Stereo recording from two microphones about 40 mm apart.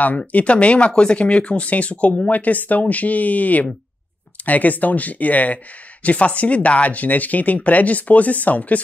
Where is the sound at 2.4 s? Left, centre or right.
Left.